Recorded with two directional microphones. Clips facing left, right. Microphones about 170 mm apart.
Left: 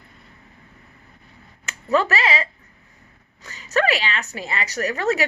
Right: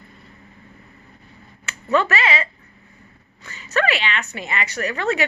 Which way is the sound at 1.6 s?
35° left (ahead or behind).